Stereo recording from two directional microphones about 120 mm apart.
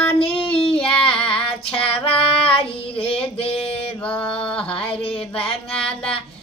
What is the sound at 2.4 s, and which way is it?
Child singing, 50° left (ahead or behind).